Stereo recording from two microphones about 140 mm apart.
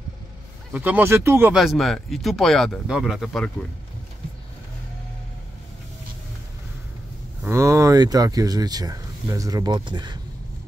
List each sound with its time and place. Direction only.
0.7 s speech: 10° right (ahead or behind)
1.5 s speech: centre (ahead or behind)
7.4 s speech: 20° right (ahead or behind)